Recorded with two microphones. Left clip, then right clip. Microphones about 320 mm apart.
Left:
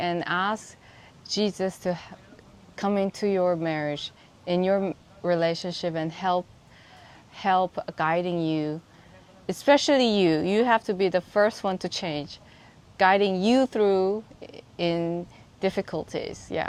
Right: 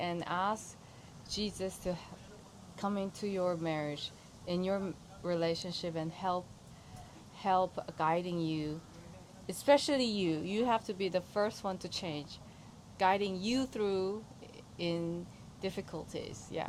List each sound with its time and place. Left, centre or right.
0.0 s a woman's voice: left